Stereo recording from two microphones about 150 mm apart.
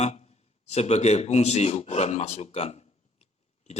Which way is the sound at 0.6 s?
45° left (ahead or behind).